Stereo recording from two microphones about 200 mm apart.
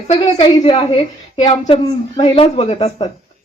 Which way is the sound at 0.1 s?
20° left (ahead or behind).